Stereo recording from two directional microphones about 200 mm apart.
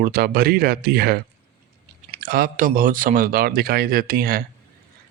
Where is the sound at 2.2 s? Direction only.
45° right (ahead or behind).